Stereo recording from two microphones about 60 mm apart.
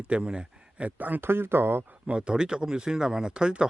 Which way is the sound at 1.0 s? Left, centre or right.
Right.